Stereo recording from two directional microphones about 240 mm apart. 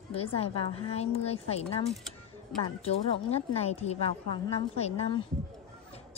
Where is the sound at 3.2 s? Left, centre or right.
Left.